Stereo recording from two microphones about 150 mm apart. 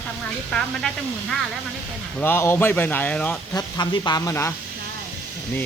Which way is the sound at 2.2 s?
15° left (ahead or behind).